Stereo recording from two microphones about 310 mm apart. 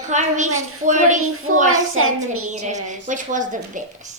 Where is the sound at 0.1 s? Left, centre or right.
Right.